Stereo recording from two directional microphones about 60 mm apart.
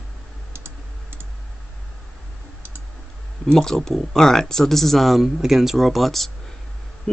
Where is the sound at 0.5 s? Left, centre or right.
Right.